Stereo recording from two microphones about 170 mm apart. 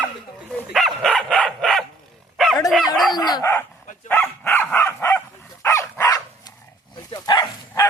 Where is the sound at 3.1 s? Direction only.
25° left (ahead or behind).